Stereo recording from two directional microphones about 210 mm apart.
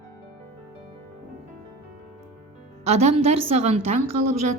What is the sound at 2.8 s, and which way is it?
A woman's voice, 30° right (ahead or behind).